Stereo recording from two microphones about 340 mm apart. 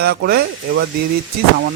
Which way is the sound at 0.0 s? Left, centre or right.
Right.